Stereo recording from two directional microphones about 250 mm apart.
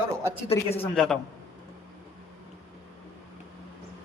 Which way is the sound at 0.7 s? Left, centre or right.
Left.